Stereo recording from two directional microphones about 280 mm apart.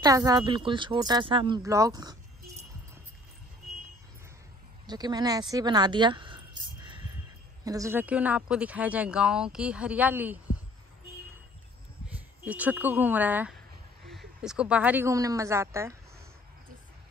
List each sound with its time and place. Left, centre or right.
0.0 s speech: centre
4.8 s speech: centre
12.1 s speech: centre